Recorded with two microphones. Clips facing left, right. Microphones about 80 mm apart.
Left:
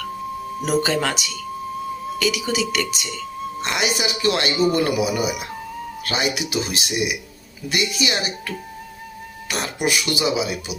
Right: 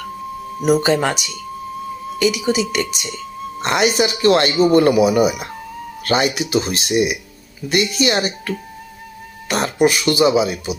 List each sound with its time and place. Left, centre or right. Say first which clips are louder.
0.8 s a woman's voice: right 4 dB; right
3.6 s speech: right 7 dB; right